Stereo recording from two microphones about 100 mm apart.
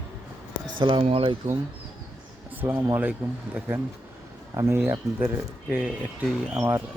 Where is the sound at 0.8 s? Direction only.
60° right (ahead or behind).